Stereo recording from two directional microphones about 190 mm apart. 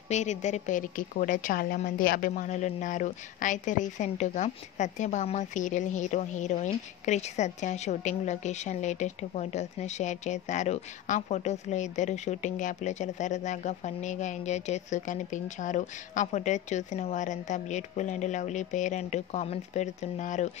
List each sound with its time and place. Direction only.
0.1 s a woman's voice: 40° left (ahead or behind)